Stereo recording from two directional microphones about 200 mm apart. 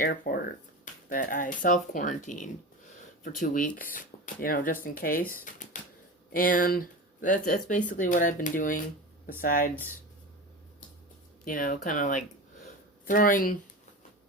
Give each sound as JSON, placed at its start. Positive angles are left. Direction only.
{"t": 0.0, "sound": "speech", "side_deg": 45}
{"t": 11.4, "sound": "speech", "side_deg": 45}